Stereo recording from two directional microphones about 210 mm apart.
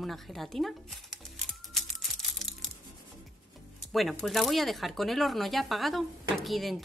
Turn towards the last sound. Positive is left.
turn(degrees=0)  # may be behind; listen again after turning